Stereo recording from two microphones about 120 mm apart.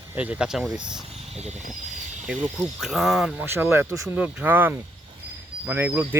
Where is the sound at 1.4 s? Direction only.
65° right (ahead or behind).